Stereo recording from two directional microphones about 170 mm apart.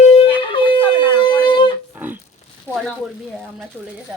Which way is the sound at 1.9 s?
10° right (ahead or behind).